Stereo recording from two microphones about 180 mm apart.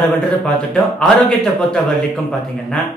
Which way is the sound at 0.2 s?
Centre (ahead or behind).